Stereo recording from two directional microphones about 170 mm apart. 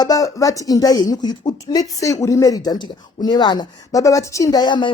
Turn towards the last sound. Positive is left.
turn(degrees=25)  # may be behind; listen again after turning